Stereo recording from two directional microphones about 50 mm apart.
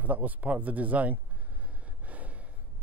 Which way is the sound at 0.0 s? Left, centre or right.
Right.